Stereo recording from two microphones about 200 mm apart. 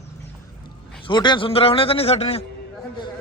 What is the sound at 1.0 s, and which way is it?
A man's voice, 25° left (ahead or behind).